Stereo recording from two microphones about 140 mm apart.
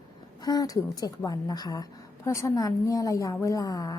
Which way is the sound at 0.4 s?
25° left (ahead or behind).